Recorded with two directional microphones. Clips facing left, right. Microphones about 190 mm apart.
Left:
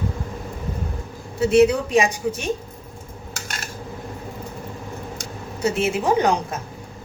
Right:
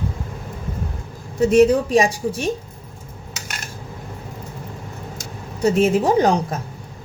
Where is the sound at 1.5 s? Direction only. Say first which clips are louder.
Right 2 dB; 40° right (ahead or behind).